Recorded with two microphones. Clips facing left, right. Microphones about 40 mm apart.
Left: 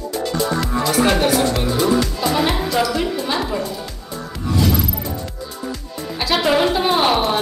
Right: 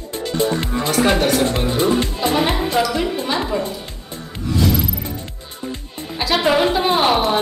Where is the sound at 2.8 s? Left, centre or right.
Centre.